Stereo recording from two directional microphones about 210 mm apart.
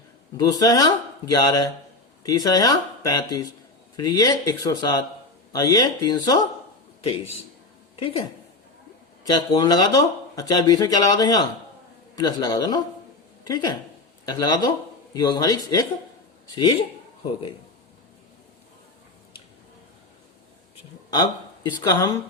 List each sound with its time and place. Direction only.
0.3 s speech: 20° left (ahead or behind)
7.9 s a woman's voice: 25° left (ahead or behind)
9.2 s speech: 20° left (ahead or behind)
14.3 s speech: 20° left (ahead or behind)
21.1 s speech: 20° left (ahead or behind)